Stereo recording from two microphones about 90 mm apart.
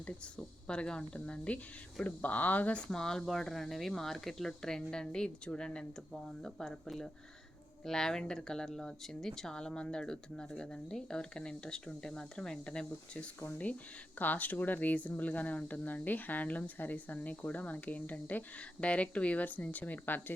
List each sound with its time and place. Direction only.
0.0 s speech: 15° left (ahead or behind)